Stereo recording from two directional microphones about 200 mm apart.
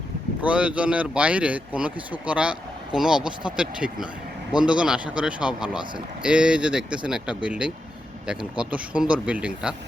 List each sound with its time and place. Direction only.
0.4 s speech: 5° right (ahead or behind)